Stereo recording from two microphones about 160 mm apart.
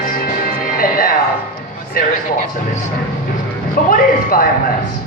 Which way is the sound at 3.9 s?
60° left (ahead or behind).